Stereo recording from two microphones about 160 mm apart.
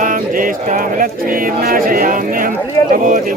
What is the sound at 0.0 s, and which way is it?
Speech, 55° right (ahead or behind).